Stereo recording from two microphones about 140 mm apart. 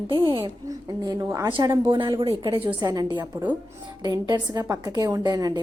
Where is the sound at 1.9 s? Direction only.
35° right (ahead or behind).